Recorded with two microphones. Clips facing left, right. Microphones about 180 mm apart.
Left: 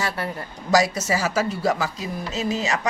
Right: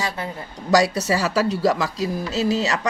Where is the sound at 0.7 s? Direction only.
35° right (ahead or behind).